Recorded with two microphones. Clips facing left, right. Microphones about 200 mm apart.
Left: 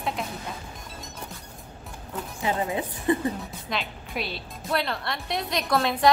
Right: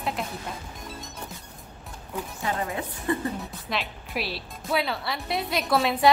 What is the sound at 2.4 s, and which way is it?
Speech, 20° left (ahead or behind).